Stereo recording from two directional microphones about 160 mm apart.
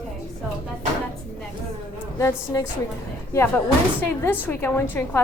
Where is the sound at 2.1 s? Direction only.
20° left (ahead or behind).